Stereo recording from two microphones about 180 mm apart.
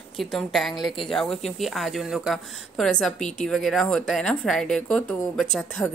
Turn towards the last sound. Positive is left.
turn(degrees=5)  # may be behind; listen again after turning